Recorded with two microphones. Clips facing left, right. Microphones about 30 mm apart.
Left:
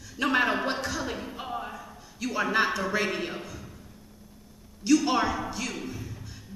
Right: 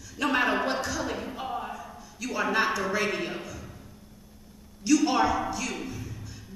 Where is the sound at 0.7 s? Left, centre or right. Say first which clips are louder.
Right 1 dB; centre.